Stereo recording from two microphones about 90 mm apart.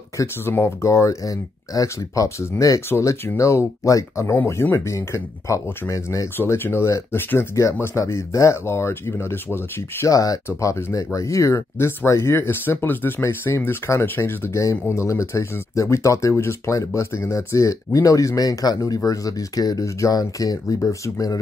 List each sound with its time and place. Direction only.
0.2 s speech: 35° left (ahead or behind)
6.3 s speech: 25° left (ahead or behind)